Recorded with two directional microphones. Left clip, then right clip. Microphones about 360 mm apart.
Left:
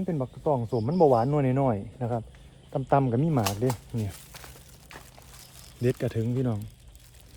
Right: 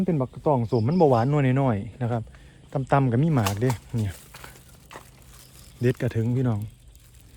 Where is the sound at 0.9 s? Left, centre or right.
Right.